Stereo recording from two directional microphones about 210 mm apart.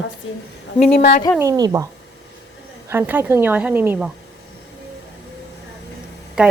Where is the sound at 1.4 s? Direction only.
15° right (ahead or behind).